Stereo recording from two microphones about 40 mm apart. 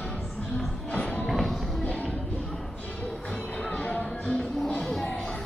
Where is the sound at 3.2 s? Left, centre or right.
Left.